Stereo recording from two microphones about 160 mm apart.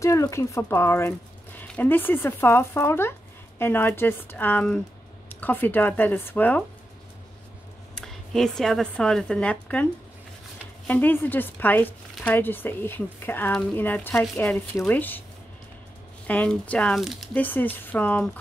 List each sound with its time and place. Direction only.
0.0 s speech: 20° left (ahead or behind)
7.9 s speech: centre (ahead or behind)
10.9 s speech: 10° left (ahead or behind)
16.3 s speech: 10° left (ahead or behind)